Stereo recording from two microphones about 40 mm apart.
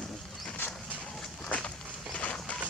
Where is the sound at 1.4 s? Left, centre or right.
Left.